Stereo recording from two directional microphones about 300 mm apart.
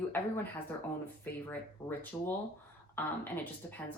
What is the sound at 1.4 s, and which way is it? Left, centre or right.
Speech, centre.